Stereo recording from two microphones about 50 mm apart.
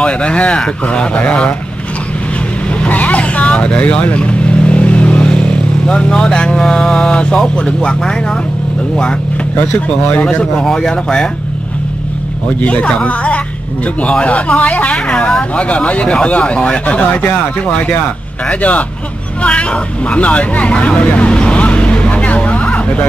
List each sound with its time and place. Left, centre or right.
0.0 s speech: left
2.8 s vehicle: left
7.3 s speech: centre
10.1 s speech: left
10.5 s speech: centre
12.6 s speech: left
20.9 s vehicle: left